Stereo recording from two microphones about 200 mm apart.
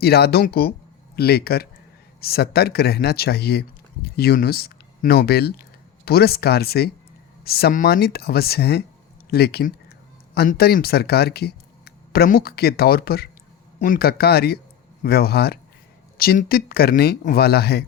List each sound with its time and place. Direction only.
0.0 s speech: 50° left (ahead or behind)